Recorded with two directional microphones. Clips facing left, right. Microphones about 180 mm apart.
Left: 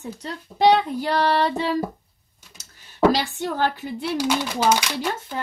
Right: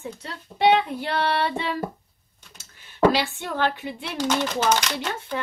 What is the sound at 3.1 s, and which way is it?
Child singing, 40° left (ahead or behind).